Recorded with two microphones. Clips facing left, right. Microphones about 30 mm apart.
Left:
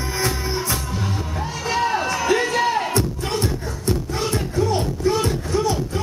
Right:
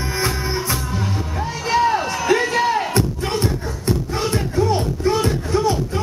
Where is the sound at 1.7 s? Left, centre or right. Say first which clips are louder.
Right 3 dB; centre.